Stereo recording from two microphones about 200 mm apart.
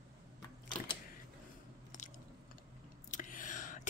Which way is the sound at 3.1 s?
40° left (ahead or behind).